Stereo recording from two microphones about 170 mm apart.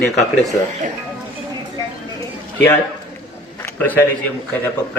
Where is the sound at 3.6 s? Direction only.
10° left (ahead or behind).